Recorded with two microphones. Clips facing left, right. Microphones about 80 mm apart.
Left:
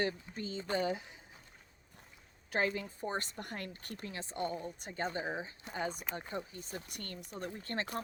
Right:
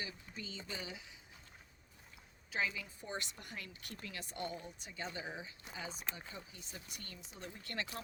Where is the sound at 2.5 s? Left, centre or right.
Left.